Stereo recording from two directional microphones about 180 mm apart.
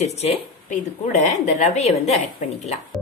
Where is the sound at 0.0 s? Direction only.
35° left (ahead or behind).